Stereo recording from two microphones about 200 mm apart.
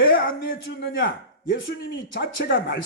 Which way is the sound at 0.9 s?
70° left (ahead or behind).